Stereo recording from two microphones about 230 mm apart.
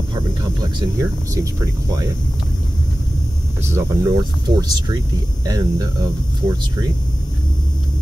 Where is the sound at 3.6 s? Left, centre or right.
Centre.